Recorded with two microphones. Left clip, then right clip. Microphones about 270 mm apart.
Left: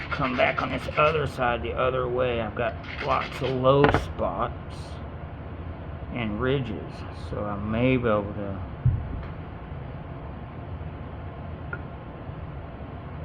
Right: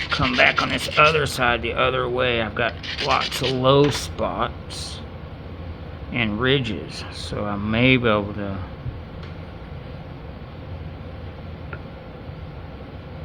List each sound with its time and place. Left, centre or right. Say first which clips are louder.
0.1 s speech: right 6 dB; right
6.1 s speech: right 7 dB; right